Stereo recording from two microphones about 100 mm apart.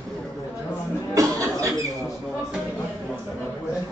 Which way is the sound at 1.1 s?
35° right (ahead or behind).